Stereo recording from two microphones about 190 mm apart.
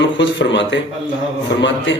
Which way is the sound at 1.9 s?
75° left (ahead or behind).